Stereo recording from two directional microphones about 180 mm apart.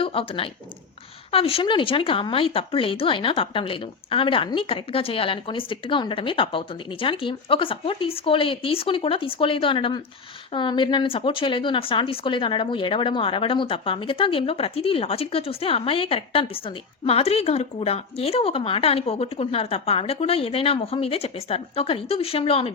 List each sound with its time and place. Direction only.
0.0 s speech: 30° left (ahead or behind)